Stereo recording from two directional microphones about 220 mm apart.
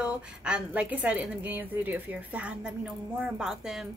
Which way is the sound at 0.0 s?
5° right (ahead or behind).